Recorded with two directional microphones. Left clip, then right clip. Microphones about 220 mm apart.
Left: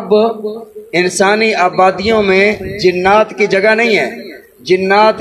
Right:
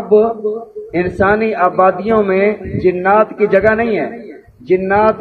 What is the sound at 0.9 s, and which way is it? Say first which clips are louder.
A man's voice: left 2 dB; 35° left (ahead or behind).